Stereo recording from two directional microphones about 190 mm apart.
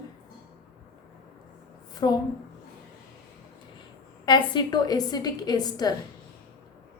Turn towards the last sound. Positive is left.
turn(degrees=20)  # may be behind; listen again after turning